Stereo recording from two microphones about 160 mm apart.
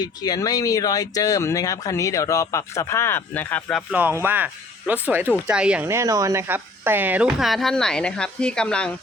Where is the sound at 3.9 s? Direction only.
15° right (ahead or behind).